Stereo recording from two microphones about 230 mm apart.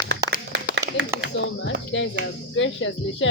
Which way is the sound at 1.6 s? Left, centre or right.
Left.